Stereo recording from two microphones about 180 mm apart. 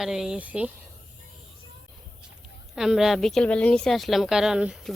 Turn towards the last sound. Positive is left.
turn(degrees=-5)  # may be behind; listen again after turning